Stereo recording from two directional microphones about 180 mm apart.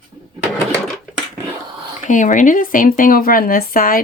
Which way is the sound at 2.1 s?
45° left (ahead or behind).